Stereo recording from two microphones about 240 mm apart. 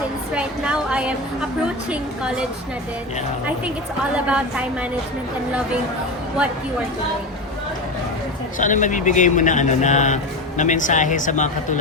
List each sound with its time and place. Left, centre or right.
0.3 s a woman's voice: centre
4.3 s a woman's voice: centre
8.5 s speech: left